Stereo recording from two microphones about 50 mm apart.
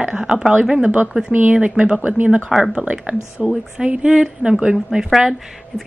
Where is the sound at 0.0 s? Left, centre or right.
Centre.